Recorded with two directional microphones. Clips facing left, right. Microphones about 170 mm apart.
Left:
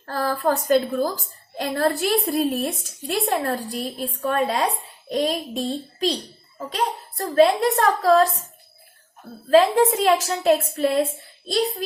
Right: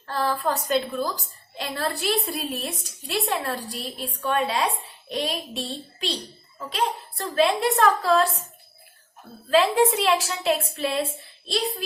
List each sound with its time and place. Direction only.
0.0 s a woman's voice: 45° left (ahead or behind)
9.5 s speech: 40° left (ahead or behind)